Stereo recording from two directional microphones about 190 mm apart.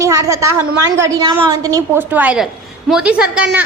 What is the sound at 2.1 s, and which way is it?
A woman's voice, 5° right (ahead or behind).